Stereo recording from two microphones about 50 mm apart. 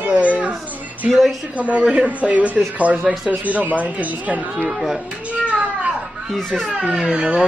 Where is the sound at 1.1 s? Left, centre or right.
Centre.